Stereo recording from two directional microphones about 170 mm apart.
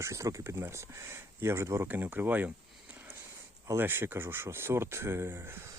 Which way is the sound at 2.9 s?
10° right (ahead or behind).